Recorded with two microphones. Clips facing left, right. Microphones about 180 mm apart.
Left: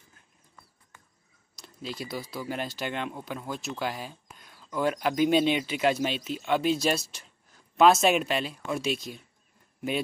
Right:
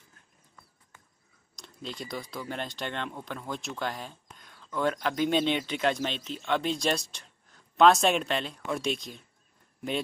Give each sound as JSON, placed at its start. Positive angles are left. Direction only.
{"t": 1.6, "sound": "speech", "side_deg": 5}